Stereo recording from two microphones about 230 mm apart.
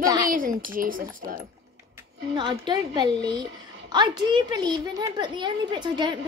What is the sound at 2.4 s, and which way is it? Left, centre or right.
A woman's voice, centre.